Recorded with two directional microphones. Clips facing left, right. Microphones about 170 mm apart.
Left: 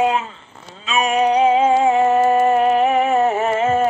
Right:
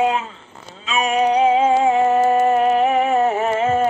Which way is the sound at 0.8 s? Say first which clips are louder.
Left 1 dB; 70° left (ahead or behind).